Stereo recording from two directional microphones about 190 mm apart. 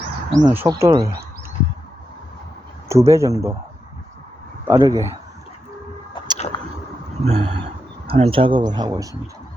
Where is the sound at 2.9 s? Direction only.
15° right (ahead or behind).